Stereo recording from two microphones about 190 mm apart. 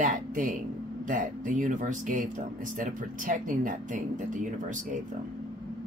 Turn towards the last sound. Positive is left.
turn(degrees=-45)  # may be behind; listen again after turning